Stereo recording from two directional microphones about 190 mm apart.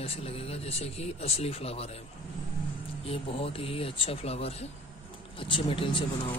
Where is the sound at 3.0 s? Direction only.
30° left (ahead or behind).